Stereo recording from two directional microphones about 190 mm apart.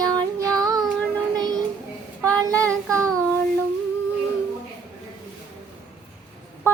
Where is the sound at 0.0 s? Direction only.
20° right (ahead or behind).